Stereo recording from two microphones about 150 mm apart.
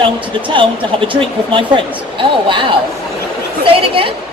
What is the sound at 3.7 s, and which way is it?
Speech, 35° right (ahead or behind).